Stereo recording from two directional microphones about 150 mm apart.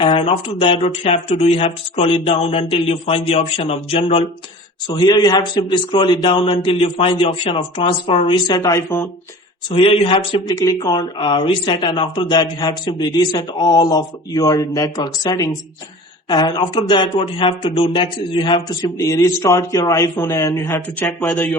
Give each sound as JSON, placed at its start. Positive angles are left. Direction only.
{"t": 0.0, "sound": "a man's voice", "side_deg": 35}
{"t": 4.9, "sound": "a man's voice", "side_deg": 30}
{"t": 9.6, "sound": "a man's voice", "side_deg": 35}